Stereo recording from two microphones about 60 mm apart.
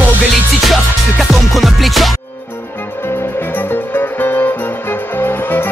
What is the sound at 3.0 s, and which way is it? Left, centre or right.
Music, left.